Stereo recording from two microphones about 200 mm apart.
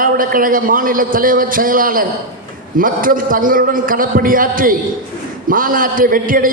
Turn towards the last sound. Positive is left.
turn(degrees=-45)  # may be behind; listen again after turning